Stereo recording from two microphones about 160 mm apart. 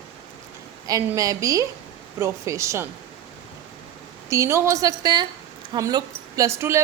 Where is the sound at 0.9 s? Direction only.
20° right (ahead or behind).